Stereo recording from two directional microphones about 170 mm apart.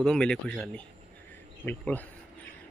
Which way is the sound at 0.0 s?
5° left (ahead or behind).